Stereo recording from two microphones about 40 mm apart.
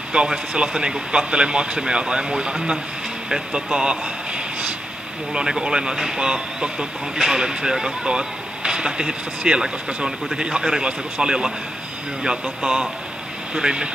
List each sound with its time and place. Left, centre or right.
0.1 s speech: right